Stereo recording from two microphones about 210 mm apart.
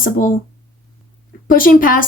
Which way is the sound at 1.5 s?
40° left (ahead or behind).